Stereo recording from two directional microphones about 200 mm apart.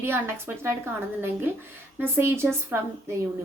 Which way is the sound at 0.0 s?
10° right (ahead or behind).